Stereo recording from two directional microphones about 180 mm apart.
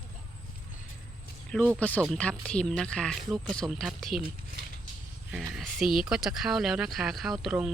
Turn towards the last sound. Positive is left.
turn(degrees=0)  # may be behind; listen again after turning